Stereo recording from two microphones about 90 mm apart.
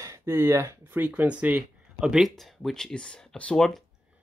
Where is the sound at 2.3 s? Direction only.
Centre (ahead or behind).